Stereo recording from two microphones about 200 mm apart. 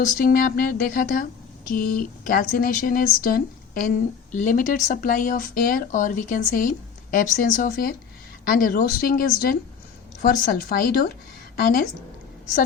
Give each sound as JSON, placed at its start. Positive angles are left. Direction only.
{"t": 0.0, "sound": "speech", "side_deg": 45}